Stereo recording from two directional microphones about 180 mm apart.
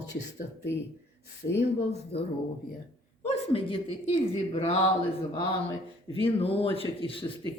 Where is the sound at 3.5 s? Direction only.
30° left (ahead or behind).